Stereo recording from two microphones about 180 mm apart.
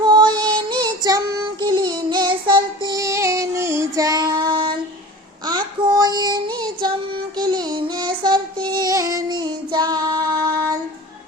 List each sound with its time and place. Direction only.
0.0 s music: 25° right (ahead or behind)
5.5 s child singing: 20° right (ahead or behind)
8.6 s female singing: 25° right (ahead or behind)